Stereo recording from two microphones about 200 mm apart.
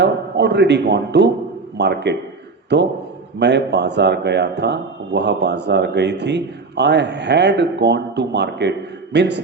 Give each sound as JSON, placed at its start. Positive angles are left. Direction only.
{"t": 0.0, "sound": "a man's voice", "side_deg": -55}